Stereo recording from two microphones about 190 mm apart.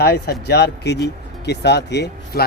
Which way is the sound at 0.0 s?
55° left (ahead or behind).